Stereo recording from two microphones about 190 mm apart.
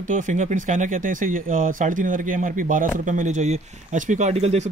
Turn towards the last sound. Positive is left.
turn(degrees=-35)  # may be behind; listen again after turning